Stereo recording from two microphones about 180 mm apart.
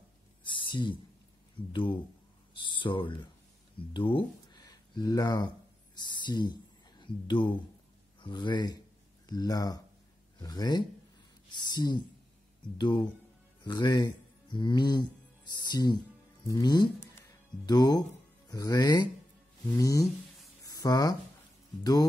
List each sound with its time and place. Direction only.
0.4 s a sound: 25° left (ahead or behind)
1.7 s speech: 30° left (ahead or behind)
17.0 s music: 20° left (ahead or behind)
18.5 s speech: 20° left (ahead or behind)